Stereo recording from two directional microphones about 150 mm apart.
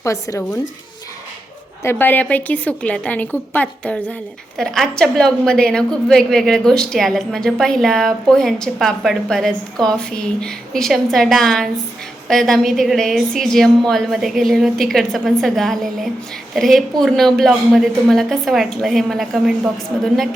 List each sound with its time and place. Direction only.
0.0 s speech: 20° left (ahead or behind)
1.8 s a woman's voice: 15° left (ahead or behind); by 20.1 s centre (ahead or behind)